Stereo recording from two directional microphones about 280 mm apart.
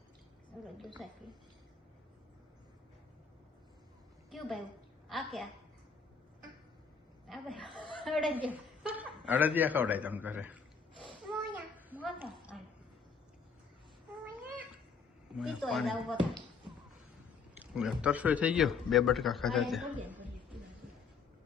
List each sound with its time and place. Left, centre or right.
1.0 s a man's voice: centre
4.3 s a woman's voice: centre
7.3 s a woman's voice: centre
11.0 s a sound: centre
11.9 s a man's voice: centre
15.3 s a man's voice: centre
17.6 s a man's voice: centre